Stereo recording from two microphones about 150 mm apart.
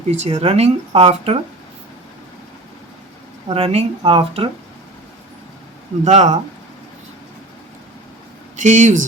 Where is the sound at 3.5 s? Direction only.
40° right (ahead or behind).